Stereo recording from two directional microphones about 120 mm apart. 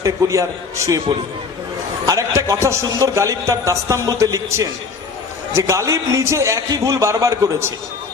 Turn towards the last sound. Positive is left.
turn(degrees=-25)  # may be behind; listen again after turning